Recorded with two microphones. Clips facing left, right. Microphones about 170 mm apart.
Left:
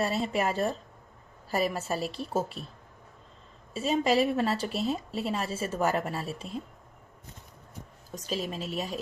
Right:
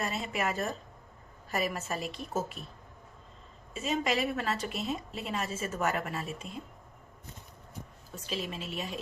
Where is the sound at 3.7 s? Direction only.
35° left (ahead or behind).